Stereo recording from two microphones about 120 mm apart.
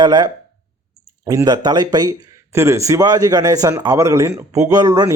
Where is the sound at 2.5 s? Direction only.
25° right (ahead or behind).